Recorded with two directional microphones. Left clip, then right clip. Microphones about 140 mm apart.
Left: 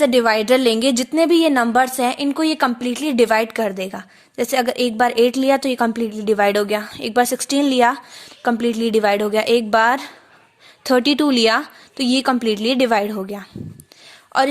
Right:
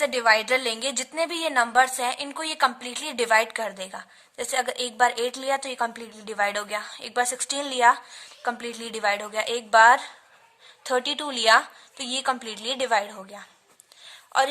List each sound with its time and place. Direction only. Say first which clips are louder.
0.0 s a woman's voice: left 6 dB; 60° left (ahead or behind)